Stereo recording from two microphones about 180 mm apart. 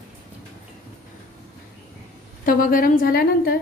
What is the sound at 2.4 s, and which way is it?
A woman's voice, 50° left (ahead or behind).